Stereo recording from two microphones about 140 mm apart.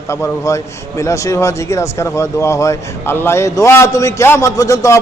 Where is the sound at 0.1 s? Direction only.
20° left (ahead or behind).